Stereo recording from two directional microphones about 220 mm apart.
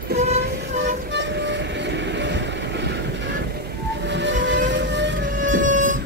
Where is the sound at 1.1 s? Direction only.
50° right (ahead or behind).